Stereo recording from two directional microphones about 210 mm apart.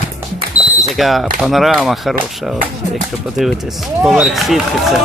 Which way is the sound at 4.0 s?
Centre (ahead or behind).